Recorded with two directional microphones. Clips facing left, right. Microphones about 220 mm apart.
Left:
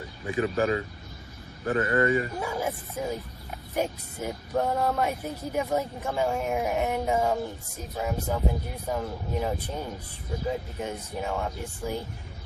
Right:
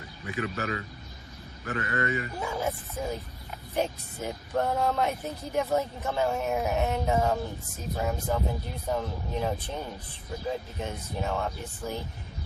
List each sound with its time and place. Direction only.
0.3 s speech: 30° left (ahead or behind)
2.4 s speech: 10° left (ahead or behind)